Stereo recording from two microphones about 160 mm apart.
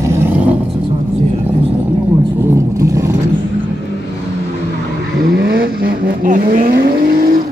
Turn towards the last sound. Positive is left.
turn(degrees=-60)  # may be behind; listen again after turning